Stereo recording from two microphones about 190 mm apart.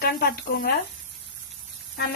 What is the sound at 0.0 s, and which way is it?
Speech, 55° left (ahead or behind).